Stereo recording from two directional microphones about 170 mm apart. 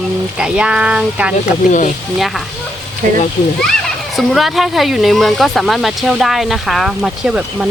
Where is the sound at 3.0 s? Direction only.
50° right (ahead or behind).